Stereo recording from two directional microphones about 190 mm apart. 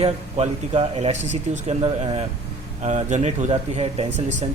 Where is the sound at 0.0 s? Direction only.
30° right (ahead or behind).